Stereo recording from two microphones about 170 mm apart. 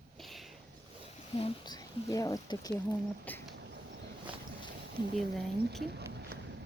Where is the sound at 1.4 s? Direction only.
35° left (ahead or behind).